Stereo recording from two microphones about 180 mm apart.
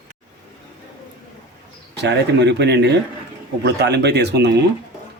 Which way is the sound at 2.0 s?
70° right (ahead or behind).